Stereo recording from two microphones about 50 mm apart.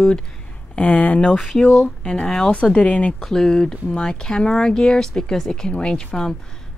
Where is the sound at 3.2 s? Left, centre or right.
Centre.